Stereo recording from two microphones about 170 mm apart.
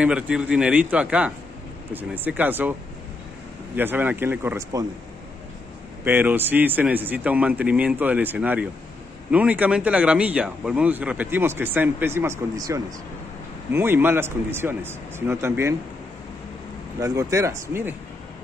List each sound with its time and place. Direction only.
0.0 s speech: 5° right (ahead or behind)
3.7 s speech: 10° right (ahead or behind)
6.0 s speech: 10° right (ahead or behind)
17.0 s speech: 20° right (ahead or behind)